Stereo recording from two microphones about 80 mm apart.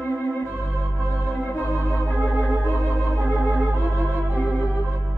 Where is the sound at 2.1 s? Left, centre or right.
Right.